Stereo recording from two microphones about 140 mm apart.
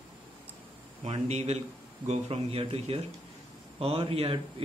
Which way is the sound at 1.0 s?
50° right (ahead or behind).